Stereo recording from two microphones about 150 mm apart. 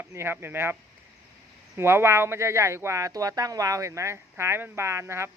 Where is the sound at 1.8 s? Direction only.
15° right (ahead or behind).